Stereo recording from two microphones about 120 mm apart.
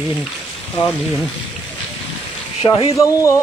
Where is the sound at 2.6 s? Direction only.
35° left (ahead or behind).